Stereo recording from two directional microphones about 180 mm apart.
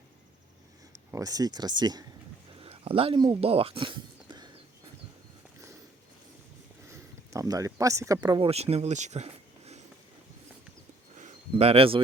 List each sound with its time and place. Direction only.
1.1 s speech: 20° right (ahead or behind)
7.3 s speech: 20° right (ahead or behind)
8.4 s speech: 35° right (ahead or behind)
11.2 s a sound: 35° right (ahead or behind)